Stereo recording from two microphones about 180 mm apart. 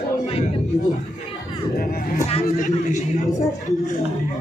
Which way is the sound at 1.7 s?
55° left (ahead or behind).